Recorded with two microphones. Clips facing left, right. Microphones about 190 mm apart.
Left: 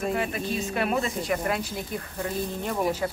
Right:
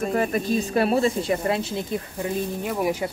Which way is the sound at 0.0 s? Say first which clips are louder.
Right 4 dB; 45° right (ahead or behind).